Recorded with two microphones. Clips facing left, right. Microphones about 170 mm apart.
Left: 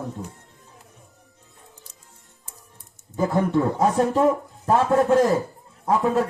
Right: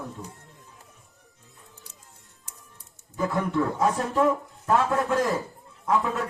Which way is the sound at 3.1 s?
30° left (ahead or behind).